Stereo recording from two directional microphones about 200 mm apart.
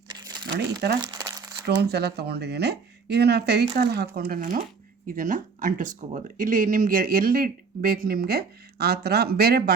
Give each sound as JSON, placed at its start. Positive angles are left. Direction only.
{"t": 0.1, "sound": "crumpling", "side_deg": -20}
{"t": 1.8, "sound": "speech", "side_deg": -55}